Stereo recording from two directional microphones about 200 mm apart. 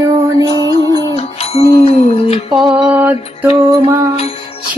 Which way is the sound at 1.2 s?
30° left (ahead or behind).